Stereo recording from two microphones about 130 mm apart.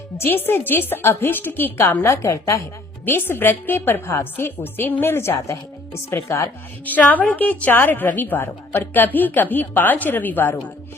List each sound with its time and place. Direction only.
0.2 s a woman's voice: 15° left (ahead or behind)